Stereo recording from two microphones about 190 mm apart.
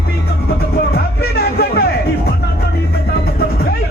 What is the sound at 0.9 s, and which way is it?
Music, 55° left (ahead or behind).